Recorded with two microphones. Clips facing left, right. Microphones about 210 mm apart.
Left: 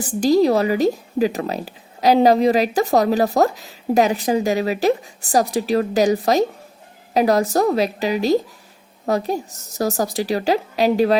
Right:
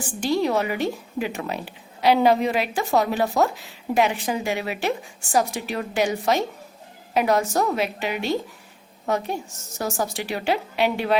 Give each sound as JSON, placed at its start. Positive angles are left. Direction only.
{"t": 0.0, "sound": "a woman's voice", "side_deg": 40}